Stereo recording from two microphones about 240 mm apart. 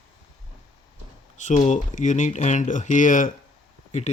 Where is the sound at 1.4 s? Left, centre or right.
Left.